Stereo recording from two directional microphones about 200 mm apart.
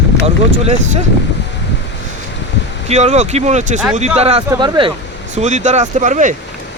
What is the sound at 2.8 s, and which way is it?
Speech, 35° right (ahead or behind).